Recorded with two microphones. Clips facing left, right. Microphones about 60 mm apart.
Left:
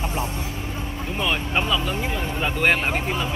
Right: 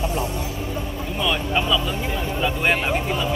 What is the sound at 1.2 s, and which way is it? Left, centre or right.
Speech, left.